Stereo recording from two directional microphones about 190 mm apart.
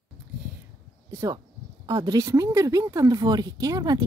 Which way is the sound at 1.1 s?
20° right (ahead or behind).